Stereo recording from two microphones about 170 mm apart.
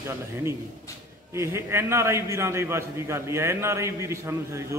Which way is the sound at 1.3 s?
15° right (ahead or behind).